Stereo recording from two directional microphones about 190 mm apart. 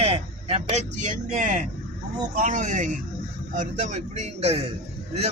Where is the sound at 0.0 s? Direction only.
35° right (ahead or behind).